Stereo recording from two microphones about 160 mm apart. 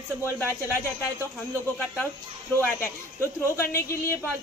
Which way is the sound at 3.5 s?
15° left (ahead or behind).